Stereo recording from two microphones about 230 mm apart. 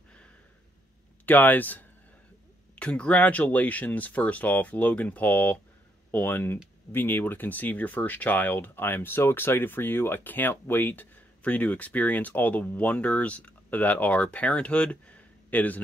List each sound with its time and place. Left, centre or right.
1.2 s speech: centre